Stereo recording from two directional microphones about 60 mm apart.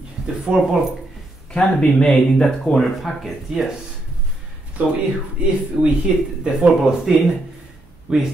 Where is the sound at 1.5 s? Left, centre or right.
Centre.